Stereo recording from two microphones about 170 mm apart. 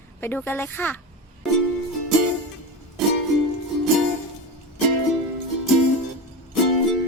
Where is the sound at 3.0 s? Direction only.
Centre (ahead or behind).